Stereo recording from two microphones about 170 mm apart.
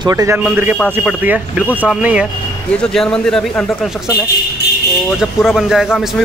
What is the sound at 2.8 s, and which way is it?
Speech, 5° left (ahead or behind).